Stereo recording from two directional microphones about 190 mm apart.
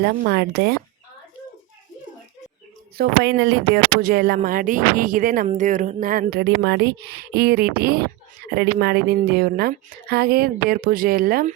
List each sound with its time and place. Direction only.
0.0 s speech: 55° right (ahead or behind)
3.0 s speech: 60° right (ahead or behind)